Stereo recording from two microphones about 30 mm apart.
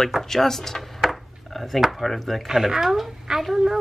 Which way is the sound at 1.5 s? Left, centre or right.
Centre.